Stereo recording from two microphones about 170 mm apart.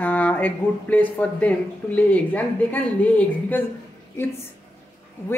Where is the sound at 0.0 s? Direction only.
10° left (ahead or behind).